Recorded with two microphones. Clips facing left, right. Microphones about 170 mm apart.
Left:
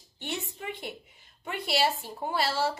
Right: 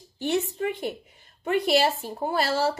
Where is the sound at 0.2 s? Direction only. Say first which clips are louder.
Right 11 dB; 40° right (ahead or behind).